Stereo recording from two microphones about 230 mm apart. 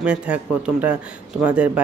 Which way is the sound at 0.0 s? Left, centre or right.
Centre.